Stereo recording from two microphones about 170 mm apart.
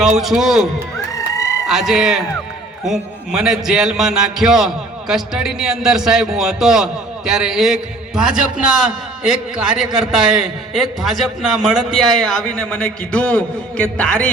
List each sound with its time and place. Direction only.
0.2 s a man's voice: centre (ahead or behind)
1.1 s a sound: 20° left (ahead or behind)
1.6 s a man's voice: centre (ahead or behind)